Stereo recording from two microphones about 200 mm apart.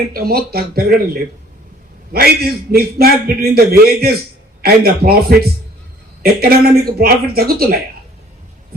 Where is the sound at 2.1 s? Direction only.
50° right (ahead or behind).